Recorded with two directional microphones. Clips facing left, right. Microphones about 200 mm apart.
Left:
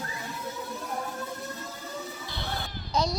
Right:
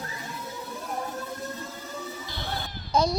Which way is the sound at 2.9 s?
50° right (ahead or behind).